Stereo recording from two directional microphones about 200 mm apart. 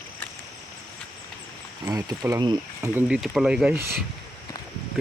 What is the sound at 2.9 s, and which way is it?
Speech, 5° right (ahead or behind).